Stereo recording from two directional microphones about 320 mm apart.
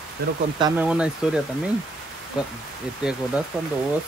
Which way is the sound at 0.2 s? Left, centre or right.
Right.